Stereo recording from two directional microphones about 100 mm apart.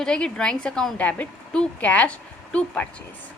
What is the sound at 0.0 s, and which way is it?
A woman's voice, 5° left (ahead or behind).